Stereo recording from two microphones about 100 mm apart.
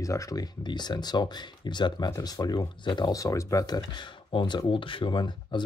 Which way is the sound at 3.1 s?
35° left (ahead or behind).